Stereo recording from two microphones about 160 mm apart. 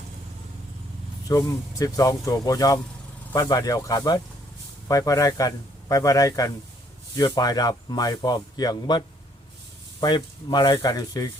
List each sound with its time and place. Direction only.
1.3 s speech: 20° left (ahead or behind)